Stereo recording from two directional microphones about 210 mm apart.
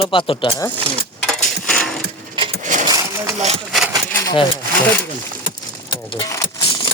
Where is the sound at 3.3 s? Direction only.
30° right (ahead or behind).